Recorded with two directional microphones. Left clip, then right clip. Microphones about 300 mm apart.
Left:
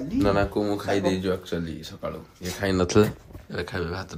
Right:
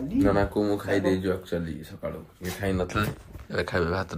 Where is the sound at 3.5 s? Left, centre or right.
Centre.